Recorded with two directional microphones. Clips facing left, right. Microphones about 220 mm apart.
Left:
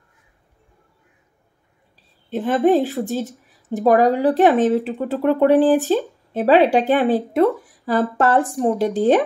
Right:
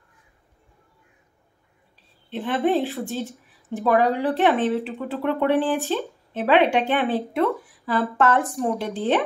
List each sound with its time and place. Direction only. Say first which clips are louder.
2.3 s speech: left 6 dB; 40° left (ahead or behind)
8.9 s speech: left 7 dB; 45° left (ahead or behind)